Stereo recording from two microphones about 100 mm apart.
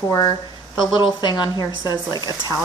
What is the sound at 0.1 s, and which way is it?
Speech, 40° left (ahead or behind).